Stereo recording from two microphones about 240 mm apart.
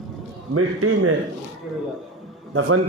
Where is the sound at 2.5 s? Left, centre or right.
Right.